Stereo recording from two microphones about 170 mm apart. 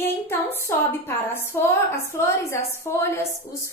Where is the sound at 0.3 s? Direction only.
15° left (ahead or behind).